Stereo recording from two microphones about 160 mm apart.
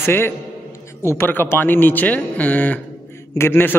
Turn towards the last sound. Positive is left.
turn(degrees=15)  # may be behind; listen again after turning